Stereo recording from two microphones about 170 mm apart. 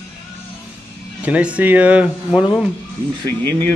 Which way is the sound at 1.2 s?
5° right (ahead or behind).